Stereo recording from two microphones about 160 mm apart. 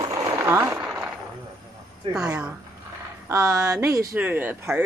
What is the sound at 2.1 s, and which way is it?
Speech, 20° right (ahead or behind).